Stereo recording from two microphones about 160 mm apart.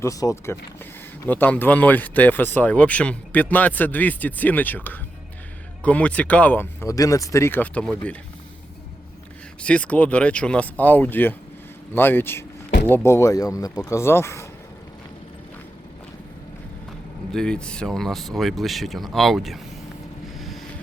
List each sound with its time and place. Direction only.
0.0 s speech: 20° left (ahead or behind)
9.6 s speech: 10° left (ahead or behind)
17.3 s speech: 5° left (ahead or behind)
20.4 s vehicle: centre (ahead or behind)